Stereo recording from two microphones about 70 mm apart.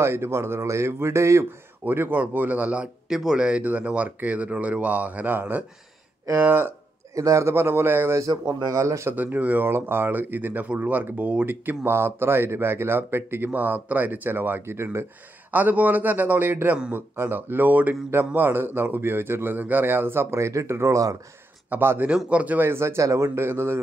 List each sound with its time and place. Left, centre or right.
0.0 s speech: right
1.9 s speech: right
7.2 s speech: right
8.3 s a man's voice: right
8.8 s speech: right
9.1 s speech: right
15.5 s speech: right
21.6 s speech: right
22.0 s speech: centre
22.6 s speech: right